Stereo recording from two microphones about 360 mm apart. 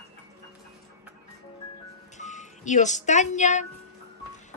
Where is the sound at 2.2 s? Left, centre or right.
Centre.